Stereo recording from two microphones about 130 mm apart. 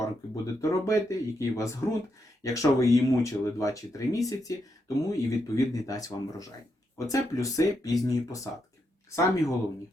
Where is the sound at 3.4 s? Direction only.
25° left (ahead or behind).